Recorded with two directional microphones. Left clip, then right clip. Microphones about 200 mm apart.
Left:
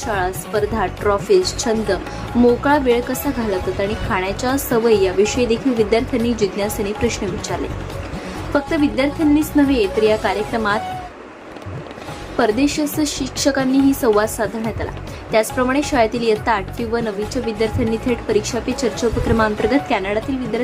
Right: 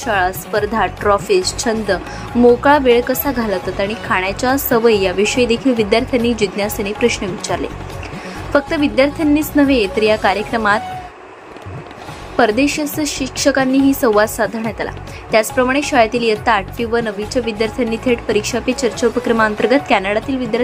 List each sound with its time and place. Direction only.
0.0 s a woman's voice: 15° right (ahead or behind)
8.5 s a woman's voice: 15° right (ahead or behind)
12.4 s a woman's voice: 15° right (ahead or behind)